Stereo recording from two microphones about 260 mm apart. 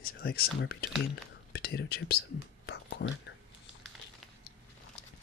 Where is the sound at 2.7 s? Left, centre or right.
Left.